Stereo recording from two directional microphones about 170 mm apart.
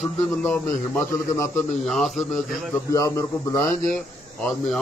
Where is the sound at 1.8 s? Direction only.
Centre (ahead or behind).